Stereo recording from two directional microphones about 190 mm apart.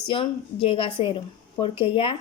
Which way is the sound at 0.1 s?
30° left (ahead or behind).